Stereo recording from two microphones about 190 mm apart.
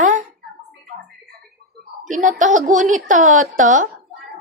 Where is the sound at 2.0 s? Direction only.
40° right (ahead or behind).